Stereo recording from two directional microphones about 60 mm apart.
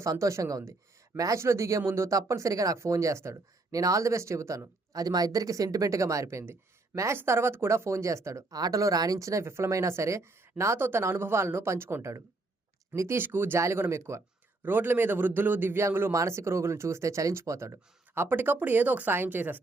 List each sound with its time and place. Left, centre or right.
0.0 s speech: right
1.1 s speech: right
1.4 s speech: right
2.1 s speech: right
2.7 s speech: right
6.2 s speech: right
8.4 s speech: right
13.1 s a man's voice: right
13.6 s speech: right
14.6 s a man's voice: right
16.1 s speech: right
18.1 s a man's voice: right